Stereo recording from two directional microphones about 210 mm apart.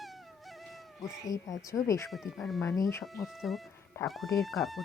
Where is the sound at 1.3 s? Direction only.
15° left (ahead or behind).